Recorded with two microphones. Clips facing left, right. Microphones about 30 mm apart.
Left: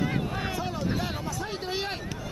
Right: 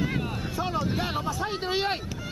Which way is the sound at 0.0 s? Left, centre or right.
Centre.